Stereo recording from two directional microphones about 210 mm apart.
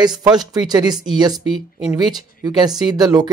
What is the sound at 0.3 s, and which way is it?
Speech, 20° right (ahead or behind).